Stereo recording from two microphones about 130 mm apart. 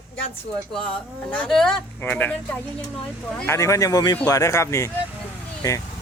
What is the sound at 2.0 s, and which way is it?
Speech, 15° left (ahead or behind).